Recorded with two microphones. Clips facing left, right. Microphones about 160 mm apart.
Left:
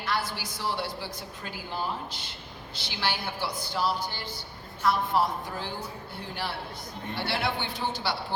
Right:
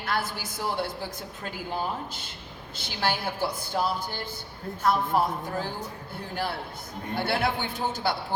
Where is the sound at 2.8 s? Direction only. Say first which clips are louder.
Right 3 dB; 50° right (ahead or behind).